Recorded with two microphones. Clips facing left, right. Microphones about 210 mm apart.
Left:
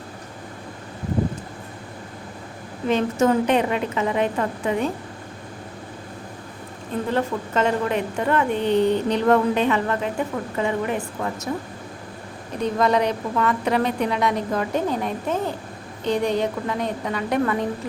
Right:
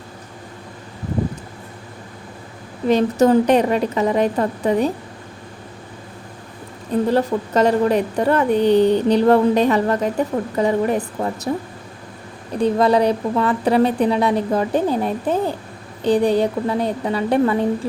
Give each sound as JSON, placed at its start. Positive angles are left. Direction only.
{"t": 2.9, "sound": "a woman's voice", "side_deg": -35}
{"t": 7.1, "sound": "a woman's voice", "side_deg": -35}
{"t": 12.5, "sound": "a woman's voice", "side_deg": -30}